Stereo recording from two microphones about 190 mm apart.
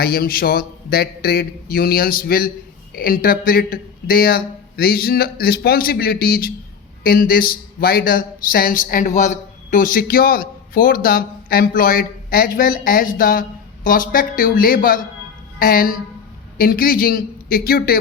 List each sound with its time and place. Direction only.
0.0 s a woman's voice: 55° left (ahead or behind)